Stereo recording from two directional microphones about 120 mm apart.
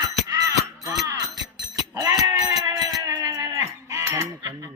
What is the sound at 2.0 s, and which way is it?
Sheep, 30° right (ahead or behind).